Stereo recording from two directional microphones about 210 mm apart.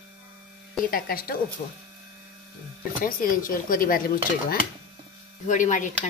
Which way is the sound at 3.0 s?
40° left (ahead or behind).